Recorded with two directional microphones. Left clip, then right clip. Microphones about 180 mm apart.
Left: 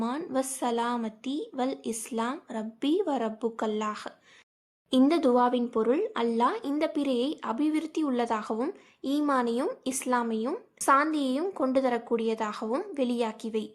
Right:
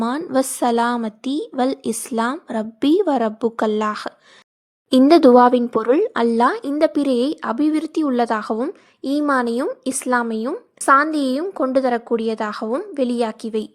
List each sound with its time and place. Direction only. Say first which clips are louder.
0.2 s a woman's voice: right 11 dB; 35° right (ahead or behind)